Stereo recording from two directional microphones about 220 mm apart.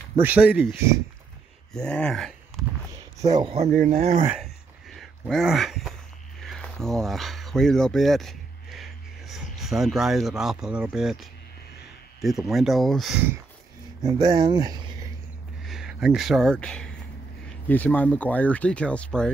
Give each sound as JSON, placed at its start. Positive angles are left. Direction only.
{"t": 0.2, "sound": "speech", "side_deg": -5}
{"t": 3.3, "sound": "speech", "side_deg": -25}
{"t": 4.3, "sound": "a sound", "side_deg": 0}
{"t": 6.4, "sound": "speech", "side_deg": 0}
{"t": 14.0, "sound": "speech", "side_deg": -15}
{"t": 15.6, "sound": "speech", "side_deg": 0}